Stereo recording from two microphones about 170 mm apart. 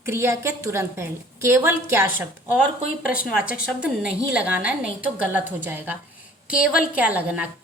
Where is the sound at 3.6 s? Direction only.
5° right (ahead or behind).